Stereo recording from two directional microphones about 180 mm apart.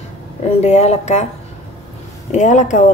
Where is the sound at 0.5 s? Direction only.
35° left (ahead or behind).